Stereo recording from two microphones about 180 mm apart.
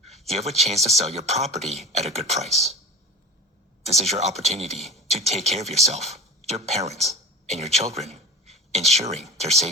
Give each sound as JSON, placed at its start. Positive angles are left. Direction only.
{"t": 0.3, "sound": "a man's voice", "side_deg": -35}
{"t": 3.8, "sound": "a man's voice", "side_deg": -35}
{"t": 4.8, "sound": "speech", "side_deg": 0}
{"t": 5.0, "sound": "speech", "side_deg": -35}